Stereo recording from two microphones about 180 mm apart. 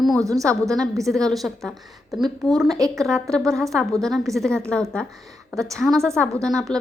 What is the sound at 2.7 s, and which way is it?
Speech, 20° right (ahead or behind).